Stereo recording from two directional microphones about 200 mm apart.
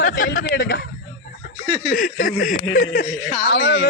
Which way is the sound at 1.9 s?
45° left (ahead or behind).